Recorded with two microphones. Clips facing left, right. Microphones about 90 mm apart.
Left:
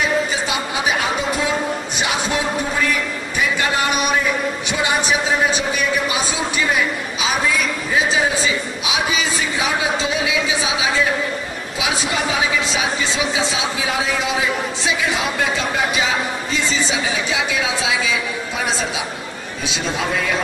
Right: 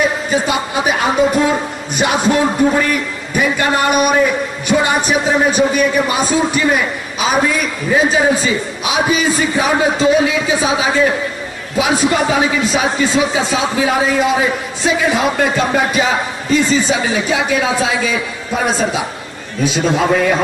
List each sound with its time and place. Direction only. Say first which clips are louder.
0.0 s a man's voice: right 4 dB; 45° right (ahead or behind)